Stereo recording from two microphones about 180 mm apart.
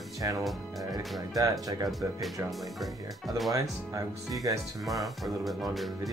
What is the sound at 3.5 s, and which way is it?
Speech, 20° right (ahead or behind).